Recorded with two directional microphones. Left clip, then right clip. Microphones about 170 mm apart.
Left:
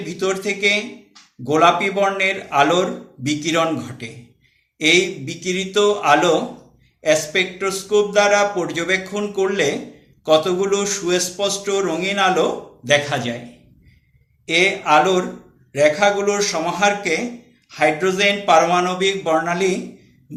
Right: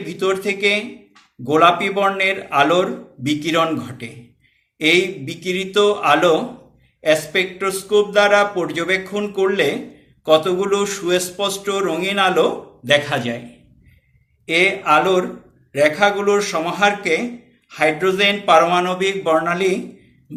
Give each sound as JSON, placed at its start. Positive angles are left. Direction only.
{"t": 0.0, "sound": "a man's voice", "side_deg": -15}
{"t": 14.4, "sound": "a man's voice", "side_deg": -15}